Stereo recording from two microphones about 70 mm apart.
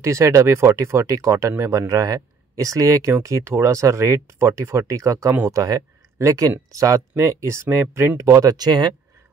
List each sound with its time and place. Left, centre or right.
0.0 s speech: right
6.1 s speech: right
8.5 s speech: right